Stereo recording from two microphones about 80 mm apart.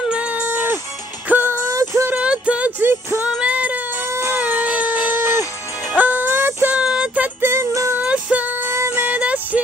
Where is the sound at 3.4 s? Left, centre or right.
Centre.